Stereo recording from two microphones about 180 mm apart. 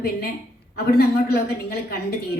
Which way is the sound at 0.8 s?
60° left (ahead or behind).